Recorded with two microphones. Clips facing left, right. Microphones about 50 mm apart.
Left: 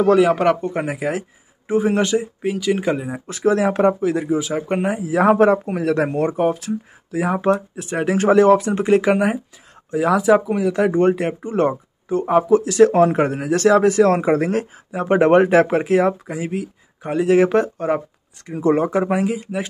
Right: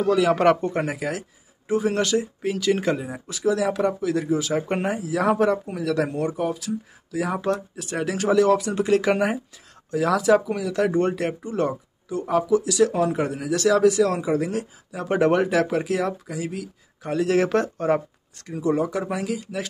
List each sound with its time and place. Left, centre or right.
0.3 s speech: centre
1.7 s speech: left
3.3 s speech: left; by 4.6 s centre
4.6 s speech: centre
5.0 s speech: left
7.2 s speech: left
9.1 s speech: centre
9.8 s speech: left
14.9 s speech: left; by 18.5 s centre
18.6 s speech: left